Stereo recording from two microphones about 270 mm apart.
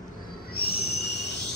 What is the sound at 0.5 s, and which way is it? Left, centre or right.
Owl, left.